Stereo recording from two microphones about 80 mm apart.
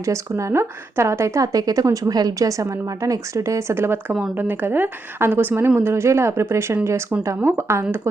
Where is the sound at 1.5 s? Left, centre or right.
Right.